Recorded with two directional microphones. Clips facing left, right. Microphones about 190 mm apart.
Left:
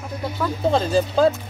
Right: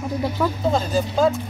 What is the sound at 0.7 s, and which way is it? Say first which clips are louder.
Speech: left 4 dB; 30° left (ahead or behind).